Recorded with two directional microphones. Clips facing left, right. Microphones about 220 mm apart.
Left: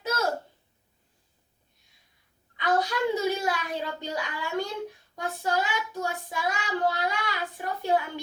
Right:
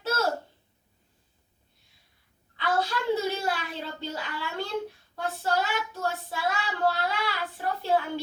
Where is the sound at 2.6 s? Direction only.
15° left (ahead or behind).